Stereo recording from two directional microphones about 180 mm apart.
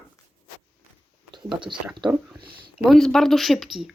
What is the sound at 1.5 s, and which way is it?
Speech, 30° right (ahead or behind).